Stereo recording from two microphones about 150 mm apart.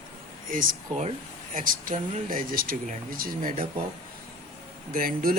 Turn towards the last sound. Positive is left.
turn(degrees=-70)  # may be behind; listen again after turning